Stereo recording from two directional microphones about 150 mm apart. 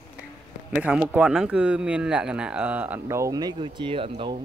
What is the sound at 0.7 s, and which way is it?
Speech, 5° right (ahead or behind).